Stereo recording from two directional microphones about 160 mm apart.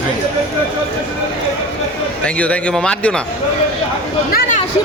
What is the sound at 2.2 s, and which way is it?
Speech, 10° left (ahead or behind).